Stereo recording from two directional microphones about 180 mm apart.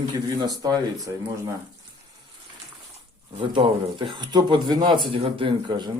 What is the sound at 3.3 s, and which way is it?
A man's voice, 30° right (ahead or behind).